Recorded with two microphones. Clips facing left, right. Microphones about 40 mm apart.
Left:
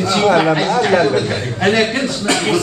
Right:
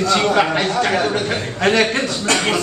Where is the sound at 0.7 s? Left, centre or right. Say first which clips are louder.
Left 4 dB; centre.